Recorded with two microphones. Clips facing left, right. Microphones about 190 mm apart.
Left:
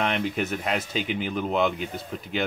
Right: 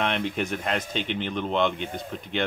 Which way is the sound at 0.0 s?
Centre (ahead or behind).